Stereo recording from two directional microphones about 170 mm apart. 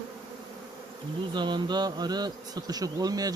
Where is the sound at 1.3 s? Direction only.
25° right (ahead or behind).